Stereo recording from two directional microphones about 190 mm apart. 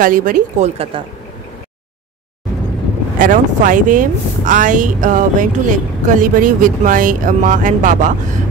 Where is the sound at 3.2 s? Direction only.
45° right (ahead or behind).